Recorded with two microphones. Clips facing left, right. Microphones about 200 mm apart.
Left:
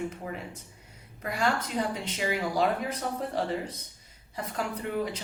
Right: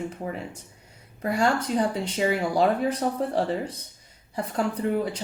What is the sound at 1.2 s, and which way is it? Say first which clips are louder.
A woman's voice: right 5 dB; 35° right (ahead or behind).